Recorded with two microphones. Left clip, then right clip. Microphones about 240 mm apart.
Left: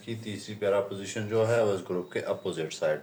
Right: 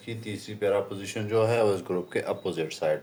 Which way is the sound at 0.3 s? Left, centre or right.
Right.